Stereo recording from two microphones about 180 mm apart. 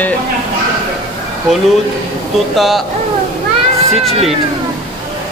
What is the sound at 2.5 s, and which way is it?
Speech, centre (ahead or behind).